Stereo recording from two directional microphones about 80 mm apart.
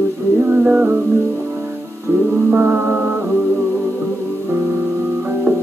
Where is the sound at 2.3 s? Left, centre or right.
Right.